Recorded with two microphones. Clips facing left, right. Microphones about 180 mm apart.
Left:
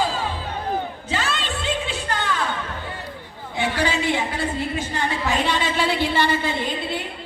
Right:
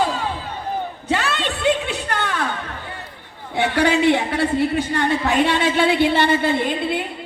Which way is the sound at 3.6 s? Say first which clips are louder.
Right 6 dB; 65° right (ahead or behind).